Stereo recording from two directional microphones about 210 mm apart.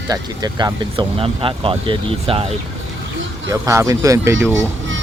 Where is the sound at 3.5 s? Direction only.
15° right (ahead or behind).